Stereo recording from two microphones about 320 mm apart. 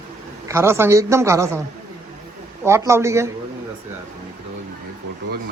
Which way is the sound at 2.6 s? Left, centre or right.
Centre.